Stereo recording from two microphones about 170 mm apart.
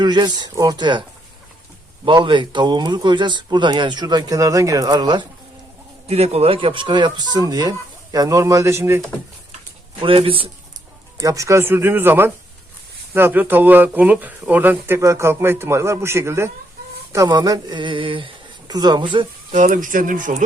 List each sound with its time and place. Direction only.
0.0 s speech: 25° right (ahead or behind)
2.0 s speech: 30° right (ahead or behind)
6.1 s speech: 35° right (ahead or behind); by 9.0 s 15° right (ahead or behind)
10.0 s speech: 30° right (ahead or behind)
11.2 s speech: 20° right (ahead or behind)
19.5 s speech: 50° right (ahead or behind)